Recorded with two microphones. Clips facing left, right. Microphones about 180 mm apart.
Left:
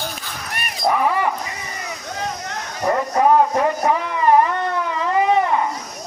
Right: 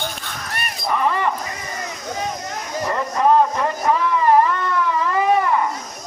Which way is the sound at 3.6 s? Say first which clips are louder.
Left 1 dB; 15° left (ahead or behind).